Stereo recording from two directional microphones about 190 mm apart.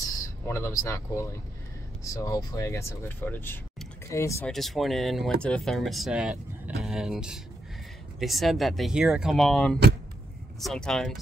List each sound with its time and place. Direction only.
0.0 s speech: 15° left (ahead or behind)
4.5 s speech: centre (ahead or behind)